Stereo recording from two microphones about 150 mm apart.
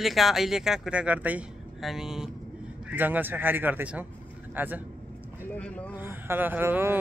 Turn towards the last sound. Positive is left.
turn(degrees=-15)  # may be behind; listen again after turning